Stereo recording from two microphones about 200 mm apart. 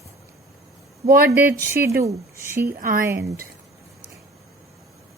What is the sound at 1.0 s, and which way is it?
Speech, 45° right (ahead or behind).